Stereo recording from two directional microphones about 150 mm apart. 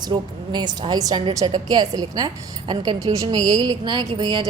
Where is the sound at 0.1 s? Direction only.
30° right (ahead or behind).